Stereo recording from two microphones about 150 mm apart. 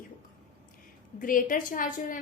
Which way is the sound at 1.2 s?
65° left (ahead or behind).